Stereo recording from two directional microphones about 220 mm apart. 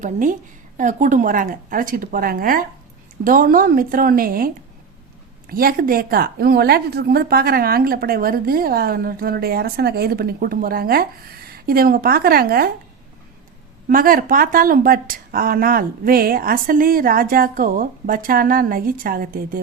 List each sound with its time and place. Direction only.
0.0 s speech: 35° right (ahead or behind)
13.8 s speech: 40° right (ahead or behind)